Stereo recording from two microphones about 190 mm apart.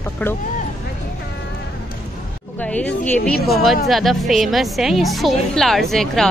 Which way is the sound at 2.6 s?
5° left (ahead or behind).